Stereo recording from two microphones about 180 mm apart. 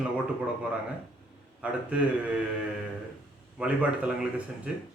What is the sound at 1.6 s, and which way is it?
Speech, 5° right (ahead or behind).